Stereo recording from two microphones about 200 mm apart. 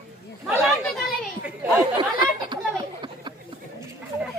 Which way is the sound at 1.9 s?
20° right (ahead or behind).